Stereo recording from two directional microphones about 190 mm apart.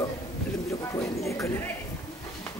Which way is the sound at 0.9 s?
15° left (ahead or behind).